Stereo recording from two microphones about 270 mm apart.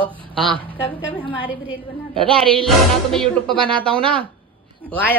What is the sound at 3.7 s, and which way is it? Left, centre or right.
Speech, centre.